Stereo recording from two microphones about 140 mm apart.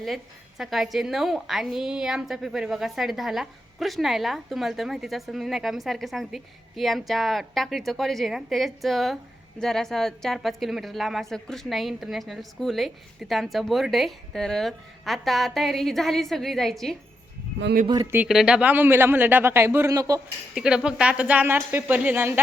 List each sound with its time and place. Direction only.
0.6 s a woman's voice: centre (ahead or behind)
17.8 s speech: 30° right (ahead or behind)
18.3 s speech: 5° right (ahead or behind); by 20.2 s 25° right (ahead or behind)
20.6 s speech: 5° right (ahead or behind)